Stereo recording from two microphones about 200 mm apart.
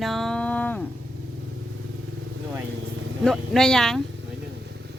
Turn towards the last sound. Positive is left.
turn(degrees=5)  # may be behind; listen again after turning